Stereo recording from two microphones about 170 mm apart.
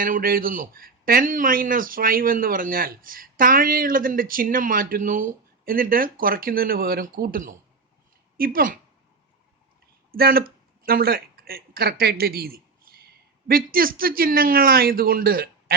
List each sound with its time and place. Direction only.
0.0 s a man's voice: 60° right (ahead or behind)
10.1 s speech: 60° right (ahead or behind)